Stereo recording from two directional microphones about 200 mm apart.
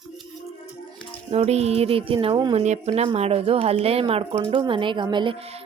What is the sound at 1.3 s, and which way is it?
Speech, 30° right (ahead or behind).